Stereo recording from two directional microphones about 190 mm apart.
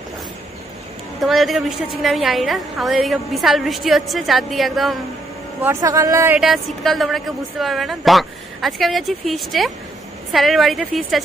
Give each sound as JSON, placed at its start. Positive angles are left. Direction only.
{"t": 1.2, "sound": "a woman's voice", "side_deg": 0}
{"t": 5.6, "sound": "speech", "side_deg": -15}
{"t": 6.4, "sound": "a woman's voice", "side_deg": 0}